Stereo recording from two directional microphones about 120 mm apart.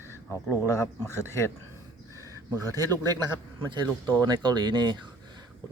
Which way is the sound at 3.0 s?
35° right (ahead or behind).